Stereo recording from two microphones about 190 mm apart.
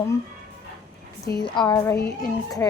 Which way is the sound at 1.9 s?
55° left (ahead or behind).